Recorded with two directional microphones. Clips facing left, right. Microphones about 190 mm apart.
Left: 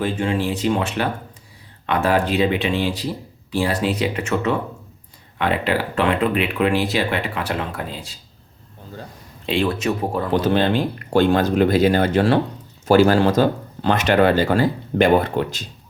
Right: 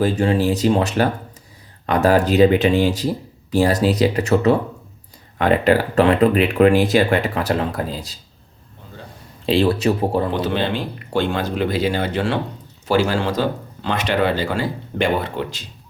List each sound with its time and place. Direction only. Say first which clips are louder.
0.0 s speech: right 4 dB; 40° right (ahead or behind)
9.5 s speech: right 4 dB; 35° right (ahead or behind)
10.3 s speech: left 3 dB; 45° left (ahead or behind)